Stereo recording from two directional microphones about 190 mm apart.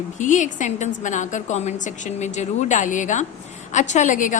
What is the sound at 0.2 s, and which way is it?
A woman's voice, 40° left (ahead or behind).